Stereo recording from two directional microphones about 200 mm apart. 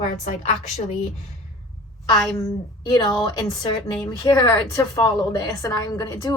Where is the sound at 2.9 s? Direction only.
20° left (ahead or behind).